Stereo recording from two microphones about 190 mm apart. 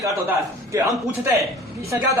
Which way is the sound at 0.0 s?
15° right (ahead or behind).